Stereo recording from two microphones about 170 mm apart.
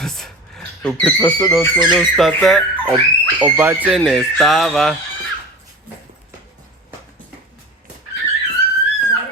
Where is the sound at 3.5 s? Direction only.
10° right (ahead or behind).